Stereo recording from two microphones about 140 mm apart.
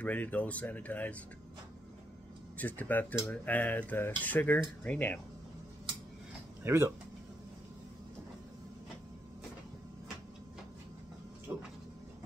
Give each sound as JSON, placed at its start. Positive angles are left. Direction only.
{"t": 0.0, "sound": "speech", "side_deg": 10}
{"t": 2.5, "sound": "speech", "side_deg": 10}
{"t": 6.6, "sound": "speech", "side_deg": -20}
{"t": 11.5, "sound": "a sound", "side_deg": -10}